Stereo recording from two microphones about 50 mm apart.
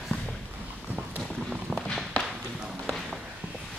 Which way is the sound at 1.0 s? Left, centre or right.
Right.